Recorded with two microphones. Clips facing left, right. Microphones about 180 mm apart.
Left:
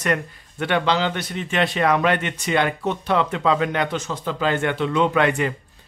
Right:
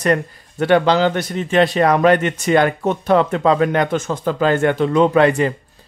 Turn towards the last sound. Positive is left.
turn(degrees=-35)  # may be behind; listen again after turning